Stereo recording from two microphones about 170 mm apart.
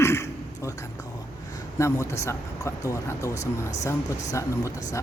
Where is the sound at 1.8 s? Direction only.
15° left (ahead or behind).